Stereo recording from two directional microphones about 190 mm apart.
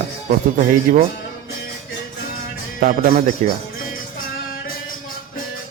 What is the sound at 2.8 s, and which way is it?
Speech, 45° right (ahead or behind).